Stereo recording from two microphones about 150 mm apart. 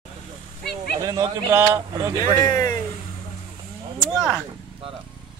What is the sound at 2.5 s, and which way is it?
Speech, 25° left (ahead or behind).